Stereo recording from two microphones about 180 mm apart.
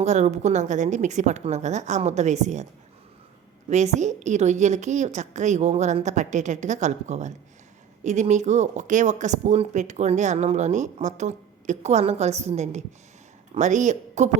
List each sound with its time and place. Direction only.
0.0 s speech: 40° right (ahead or behind)
3.7 s speech: 40° right (ahead or behind)